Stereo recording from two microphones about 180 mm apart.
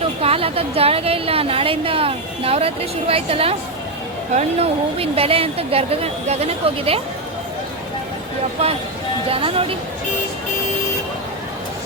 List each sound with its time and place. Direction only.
0.2 s a woman's voice: 35° right (ahead or behind)
9.3 s a woman's voice: 30° right (ahead or behind)